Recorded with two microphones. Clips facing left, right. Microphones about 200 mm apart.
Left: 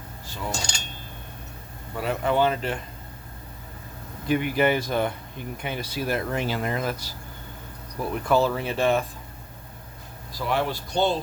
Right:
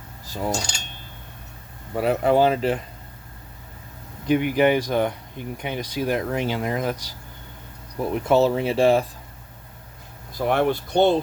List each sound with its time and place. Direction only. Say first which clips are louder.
0.3 s a sound: right 6 dB; 40° right (ahead or behind)
2.0 s speech: right 5 dB; 35° right (ahead or behind)
4.3 s speech: right 4 dB; 15° right (ahead or behind)
10.3 s speech: right 5 dB; 55° right (ahead or behind)